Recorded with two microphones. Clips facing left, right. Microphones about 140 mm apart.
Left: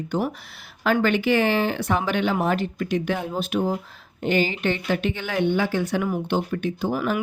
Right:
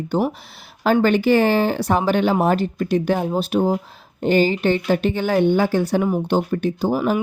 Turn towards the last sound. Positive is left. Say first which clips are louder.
# right 5 dB
turn(degrees=-30)  # may be behind; listen again after turning